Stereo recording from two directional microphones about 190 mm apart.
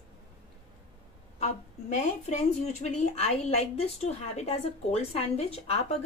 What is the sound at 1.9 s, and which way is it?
A woman's voice, 35° left (ahead or behind).